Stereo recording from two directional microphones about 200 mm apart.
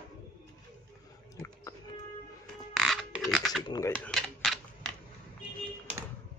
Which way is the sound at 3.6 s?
20° left (ahead or behind).